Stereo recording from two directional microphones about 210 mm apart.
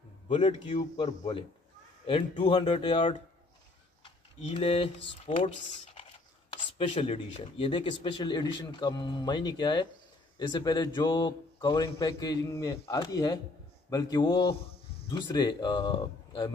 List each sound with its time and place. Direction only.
0.3 s speech: 25° left (ahead or behind)
6.5 s speech: 30° left (ahead or behind)